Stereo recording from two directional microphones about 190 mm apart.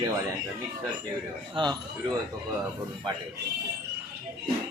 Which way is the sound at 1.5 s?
25° right (ahead or behind).